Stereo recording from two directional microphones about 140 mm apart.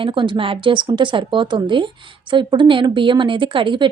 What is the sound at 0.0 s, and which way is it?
Speech, 35° right (ahead or behind).